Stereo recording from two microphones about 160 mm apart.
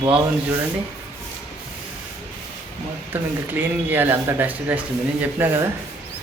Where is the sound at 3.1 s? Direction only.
10° right (ahead or behind).